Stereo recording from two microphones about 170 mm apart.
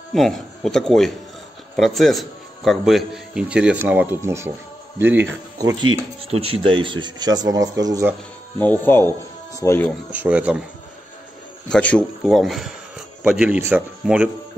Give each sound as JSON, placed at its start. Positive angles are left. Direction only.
{"t": 0.1, "sound": "a man's voice", "side_deg": 0}
{"t": 6.4, "sound": "speech", "side_deg": -30}
{"t": 8.5, "sound": "speech", "side_deg": 10}
{"t": 10.1, "sound": "speech", "side_deg": -10}
{"t": 11.7, "sound": "speech", "side_deg": 5}